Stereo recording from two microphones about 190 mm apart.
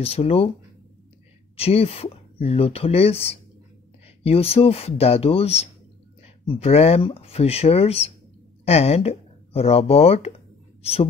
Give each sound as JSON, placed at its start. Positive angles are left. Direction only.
{"t": 0.0, "sound": "speech", "side_deg": 30}
{"t": 1.6, "sound": "a woman's voice", "side_deg": 30}